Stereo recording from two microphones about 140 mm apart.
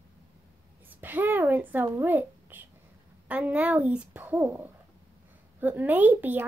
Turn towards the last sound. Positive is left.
turn(degrees=-15)  # may be behind; listen again after turning